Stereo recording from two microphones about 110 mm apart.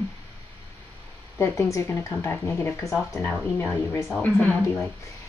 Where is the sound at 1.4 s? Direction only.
25° left (ahead or behind).